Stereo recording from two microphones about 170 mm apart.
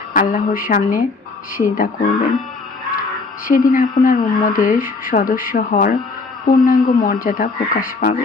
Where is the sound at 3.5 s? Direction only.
55° left (ahead or behind).